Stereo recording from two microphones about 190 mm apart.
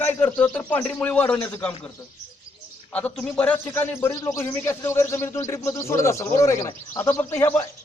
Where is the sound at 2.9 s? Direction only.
5° left (ahead or behind).